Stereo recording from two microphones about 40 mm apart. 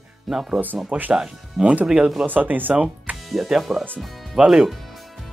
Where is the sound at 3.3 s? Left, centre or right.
Centre.